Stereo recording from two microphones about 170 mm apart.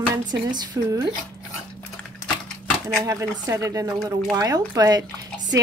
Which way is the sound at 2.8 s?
15° right (ahead or behind).